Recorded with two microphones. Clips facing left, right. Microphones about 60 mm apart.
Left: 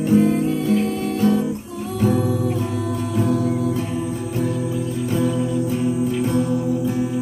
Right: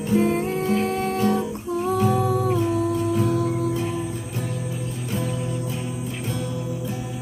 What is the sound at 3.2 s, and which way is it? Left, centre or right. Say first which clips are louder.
Music: left 2 dB; left.